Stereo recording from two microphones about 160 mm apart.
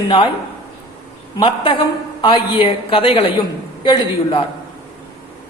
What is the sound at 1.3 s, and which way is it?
A woman's voice, 30° left (ahead or behind).